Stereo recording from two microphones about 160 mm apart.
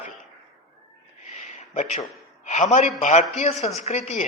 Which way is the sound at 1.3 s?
45° left (ahead or behind).